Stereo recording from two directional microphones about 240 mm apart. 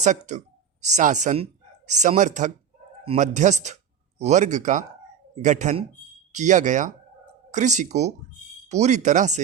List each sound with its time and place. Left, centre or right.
0.0 s speech: right